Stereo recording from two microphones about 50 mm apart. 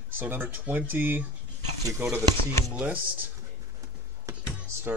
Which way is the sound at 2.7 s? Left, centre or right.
Right.